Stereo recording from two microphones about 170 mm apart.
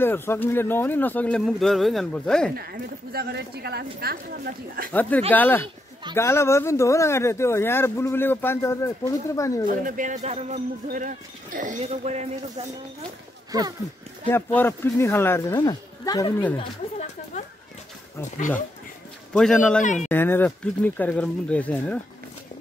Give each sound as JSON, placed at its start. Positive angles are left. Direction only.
{"t": 0.0, "sound": "speech", "side_deg": 15}
{"t": 2.5, "sound": "a woman's voice", "side_deg": -65}
{"t": 5.3, "sound": "speech", "side_deg": 10}
{"t": 9.7, "sound": "speech", "side_deg": -50}
{"t": 13.5, "sound": "speech", "side_deg": -20}
{"t": 14.3, "sound": "speech", "side_deg": 15}
{"t": 19.3, "sound": "a man's voice", "side_deg": 5}
{"t": 19.8, "sound": "speech", "side_deg": 45}
{"t": 20.1, "sound": "speech", "side_deg": 10}